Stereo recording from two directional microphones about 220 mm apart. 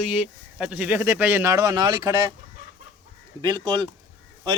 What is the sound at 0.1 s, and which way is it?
Speech, 5° right (ahead or behind).